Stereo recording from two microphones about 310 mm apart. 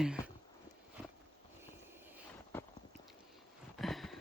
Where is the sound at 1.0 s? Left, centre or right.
Centre.